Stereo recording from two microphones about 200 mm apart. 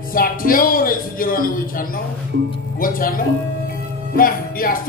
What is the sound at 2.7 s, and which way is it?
Speech, 45° left (ahead or behind).